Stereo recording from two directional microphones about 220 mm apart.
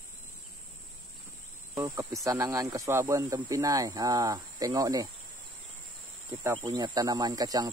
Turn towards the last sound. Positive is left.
turn(degrees=-15)  # may be behind; listen again after turning